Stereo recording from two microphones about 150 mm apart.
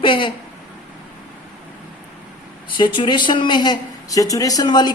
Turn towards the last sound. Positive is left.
turn(degrees=30)  # may be behind; listen again after turning